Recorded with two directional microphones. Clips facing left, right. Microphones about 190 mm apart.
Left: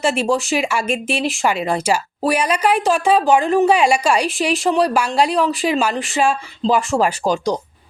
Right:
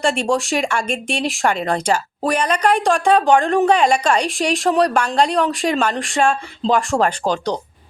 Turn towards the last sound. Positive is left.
turn(degrees=10)  # may be behind; listen again after turning